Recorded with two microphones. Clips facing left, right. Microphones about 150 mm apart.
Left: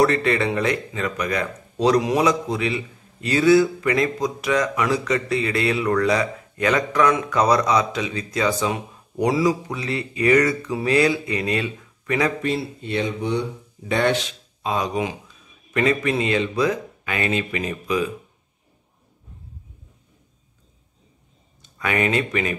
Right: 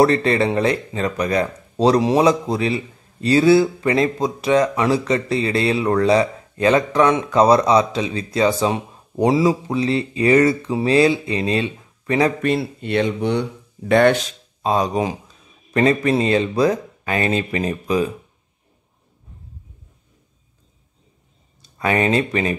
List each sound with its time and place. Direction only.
0.0 s speech: 30° right (ahead or behind)
12.4 s speech: 60° right (ahead or behind)
14.2 s a man's voice: 35° right (ahead or behind)
21.5 s speech: 35° right (ahead or behind)